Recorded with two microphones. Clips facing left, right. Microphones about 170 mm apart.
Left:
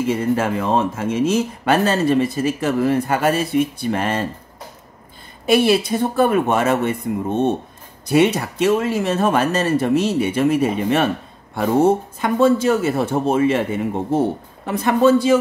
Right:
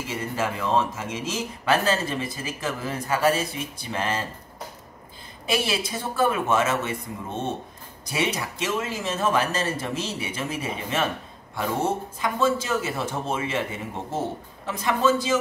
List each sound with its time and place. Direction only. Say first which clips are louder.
0.0 s speech: left 9 dB; 55° left (ahead or behind)
5.5 s speech: left 11 dB; 60° left (ahead or behind)